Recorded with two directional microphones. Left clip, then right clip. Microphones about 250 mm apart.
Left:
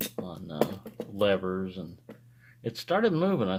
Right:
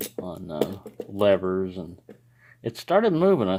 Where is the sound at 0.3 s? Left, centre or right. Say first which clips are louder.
Right 7 dB; right.